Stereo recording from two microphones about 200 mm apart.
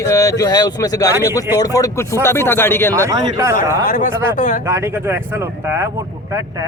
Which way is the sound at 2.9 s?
15° right (ahead or behind).